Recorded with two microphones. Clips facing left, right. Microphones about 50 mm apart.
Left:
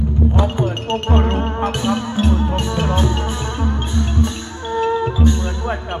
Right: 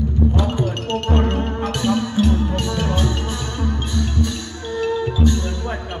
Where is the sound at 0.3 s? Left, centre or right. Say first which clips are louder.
Left 2 dB; left.